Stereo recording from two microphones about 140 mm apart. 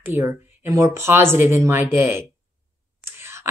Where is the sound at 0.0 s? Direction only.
15° right (ahead or behind).